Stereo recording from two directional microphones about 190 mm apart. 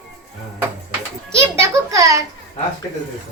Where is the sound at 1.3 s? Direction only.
15° right (ahead or behind).